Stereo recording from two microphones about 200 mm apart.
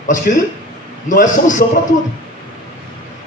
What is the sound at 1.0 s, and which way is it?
Speech, 40° left (ahead or behind).